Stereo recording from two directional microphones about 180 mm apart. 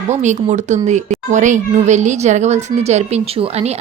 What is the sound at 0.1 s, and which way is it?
Speech, 40° right (ahead or behind).